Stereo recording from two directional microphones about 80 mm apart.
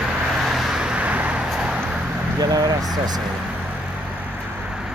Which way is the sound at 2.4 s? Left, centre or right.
Right.